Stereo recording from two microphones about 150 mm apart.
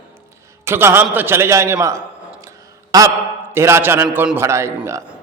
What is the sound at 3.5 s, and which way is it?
A man's voice, 15° right (ahead or behind).